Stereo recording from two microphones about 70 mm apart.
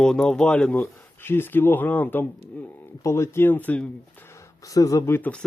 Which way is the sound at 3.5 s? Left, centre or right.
Left.